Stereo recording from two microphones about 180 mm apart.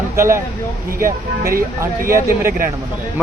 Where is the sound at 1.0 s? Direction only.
55° right (ahead or behind).